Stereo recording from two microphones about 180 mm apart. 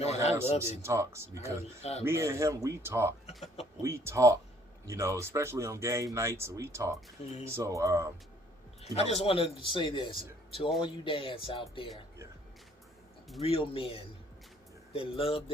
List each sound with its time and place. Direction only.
0.0 s a man's voice: 35° left (ahead or behind)
0.6 s speech: 15° right (ahead or behind)
1.8 s a man's voice: 35° left (ahead or behind)
2.0 s speech: 15° right (ahead or behind)
3.2 s speech: 35° left (ahead or behind)
3.8 s speech: 15° right (ahead or behind)
8.8 s a man's voice: 35° left (ahead or behind)
13.4 s a man's voice: 30° left (ahead or behind)